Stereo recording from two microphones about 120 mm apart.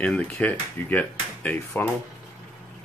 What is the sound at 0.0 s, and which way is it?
Speech, 10° left (ahead or behind).